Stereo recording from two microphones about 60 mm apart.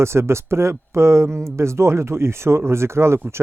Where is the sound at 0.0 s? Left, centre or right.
Right.